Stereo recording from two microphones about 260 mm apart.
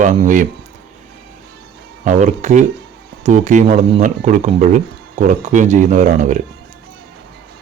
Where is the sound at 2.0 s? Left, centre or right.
Right.